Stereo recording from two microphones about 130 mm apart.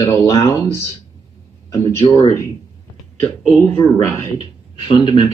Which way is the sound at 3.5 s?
15° left (ahead or behind).